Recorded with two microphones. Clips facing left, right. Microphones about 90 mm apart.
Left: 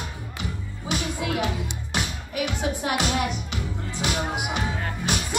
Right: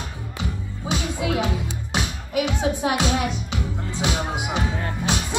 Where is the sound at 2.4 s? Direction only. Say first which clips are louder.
Right 2 dB; 20° right (ahead or behind).